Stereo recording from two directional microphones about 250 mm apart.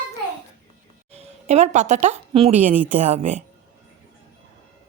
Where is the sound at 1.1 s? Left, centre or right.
Right.